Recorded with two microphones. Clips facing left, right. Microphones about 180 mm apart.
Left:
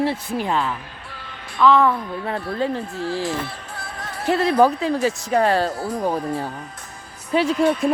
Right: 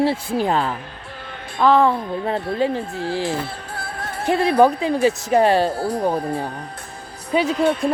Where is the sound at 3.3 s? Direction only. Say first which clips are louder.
Right 2 dB; 30° right (ahead or behind).